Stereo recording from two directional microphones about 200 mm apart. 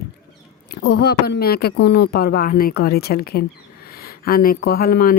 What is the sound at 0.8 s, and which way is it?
Speech, 55° left (ahead or behind).